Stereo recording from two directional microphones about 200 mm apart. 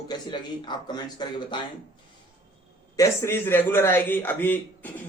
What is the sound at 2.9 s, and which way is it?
Speech, 15° left (ahead or behind).